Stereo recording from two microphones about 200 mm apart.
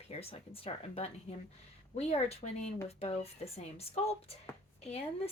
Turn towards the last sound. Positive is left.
turn(degrees=30)  # may be behind; listen again after turning